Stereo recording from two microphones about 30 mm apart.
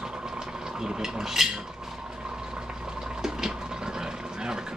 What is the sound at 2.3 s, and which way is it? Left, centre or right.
Fill, right.